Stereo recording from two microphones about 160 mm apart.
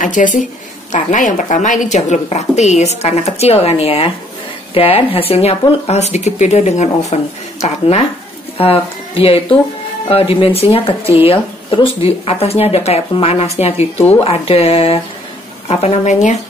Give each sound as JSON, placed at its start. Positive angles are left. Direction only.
{"t": 0.0, "sound": "a woman's voice", "side_deg": 50}